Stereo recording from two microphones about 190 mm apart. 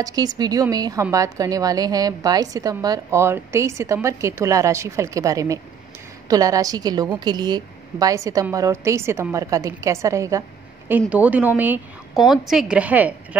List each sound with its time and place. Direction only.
0.0 s a woman's voice: 20° right (ahead or behind)